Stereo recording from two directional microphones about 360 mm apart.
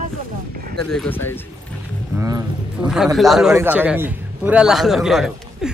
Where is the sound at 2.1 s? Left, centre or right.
Centre.